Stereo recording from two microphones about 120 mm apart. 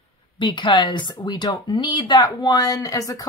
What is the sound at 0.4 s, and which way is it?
Speech, 40° left (ahead or behind).